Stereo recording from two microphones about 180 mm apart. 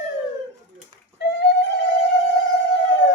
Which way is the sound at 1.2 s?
70° left (ahead or behind).